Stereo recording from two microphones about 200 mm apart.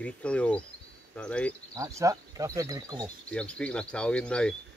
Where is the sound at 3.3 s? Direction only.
5° left (ahead or behind).